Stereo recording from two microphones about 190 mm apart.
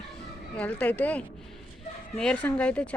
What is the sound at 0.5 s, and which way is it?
A woman's voice, 5° left (ahead or behind).